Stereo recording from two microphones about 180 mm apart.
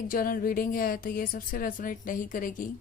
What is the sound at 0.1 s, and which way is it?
A woman's voice, 55° left (ahead or behind).